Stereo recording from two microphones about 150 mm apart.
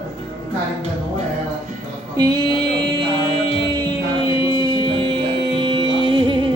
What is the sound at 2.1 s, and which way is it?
Mantra, 25° right (ahead or behind).